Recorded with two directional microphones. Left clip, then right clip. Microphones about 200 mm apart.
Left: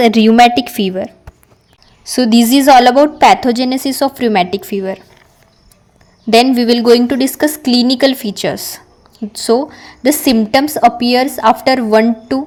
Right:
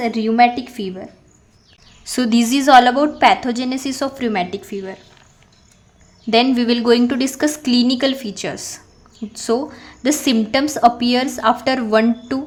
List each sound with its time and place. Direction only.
0.0 s a woman's voice: 40° left (ahead or behind)
2.0 s a woman's voice: 15° left (ahead or behind)
6.3 s a woman's voice: 20° left (ahead or behind)